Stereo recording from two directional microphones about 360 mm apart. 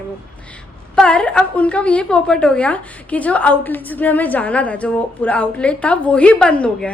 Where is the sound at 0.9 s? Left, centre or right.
Centre.